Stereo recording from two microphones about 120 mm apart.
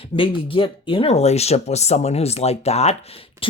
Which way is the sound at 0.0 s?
45° left (ahead or behind).